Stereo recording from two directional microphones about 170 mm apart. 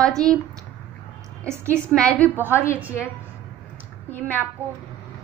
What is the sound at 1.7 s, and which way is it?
Speech, 5° left (ahead or behind).